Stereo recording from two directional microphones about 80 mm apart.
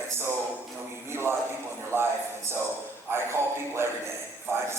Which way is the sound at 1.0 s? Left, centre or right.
Right.